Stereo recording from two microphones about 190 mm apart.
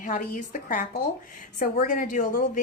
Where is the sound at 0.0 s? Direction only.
45° left (ahead or behind).